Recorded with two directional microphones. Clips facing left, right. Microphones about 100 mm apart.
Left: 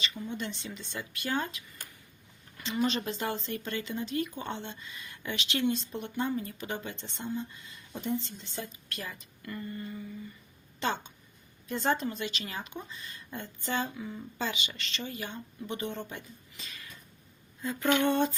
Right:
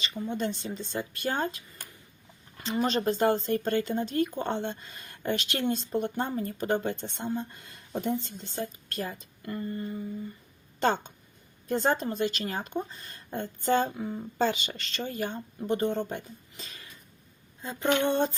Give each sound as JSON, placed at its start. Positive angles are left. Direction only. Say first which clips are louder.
{"t": 0.0, "sound": "speech", "louder": "right 5 dB", "side_deg": -35}
{"t": 8.2, "sound": "speech", "louder": "right 5 dB", "side_deg": -45}
{"t": 10.8, "sound": "speech", "louder": "right 6 dB", "side_deg": -45}
{"t": 17.6, "sound": "a sound", "louder": "right 1 dB", "side_deg": -25}